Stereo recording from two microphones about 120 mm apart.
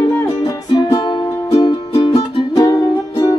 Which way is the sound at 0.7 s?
35° left (ahead or behind).